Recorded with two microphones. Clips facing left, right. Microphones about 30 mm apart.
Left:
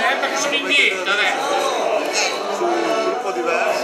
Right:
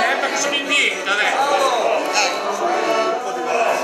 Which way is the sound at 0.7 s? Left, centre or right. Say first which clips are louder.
Left 3 dB; left.